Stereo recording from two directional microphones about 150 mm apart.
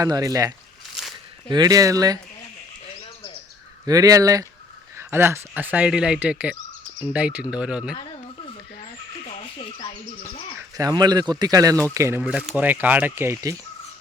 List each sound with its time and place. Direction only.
0.0 s speech: 25° right (ahead or behind)
3.8 s speech: 25° right (ahead or behind); by 7.9 s 5° right (ahead or behind)
8.8 s a sound: 40° left (ahead or behind)
10.8 s speech: 25° right (ahead or behind)
12.2 s speech: 5° right (ahead or behind)